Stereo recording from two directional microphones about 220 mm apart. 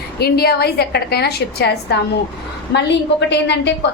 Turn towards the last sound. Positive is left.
turn(degrees=50)  # may be behind; listen again after turning